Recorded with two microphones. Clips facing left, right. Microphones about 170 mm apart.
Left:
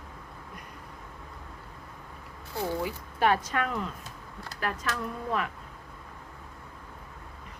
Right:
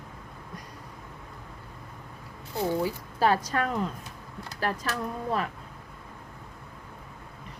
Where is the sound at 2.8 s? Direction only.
35° right (ahead or behind).